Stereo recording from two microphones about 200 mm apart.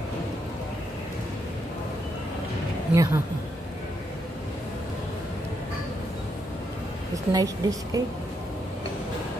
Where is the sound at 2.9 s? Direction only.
15° right (ahead or behind).